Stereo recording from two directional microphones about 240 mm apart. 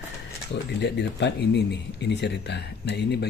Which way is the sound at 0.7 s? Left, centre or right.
Left.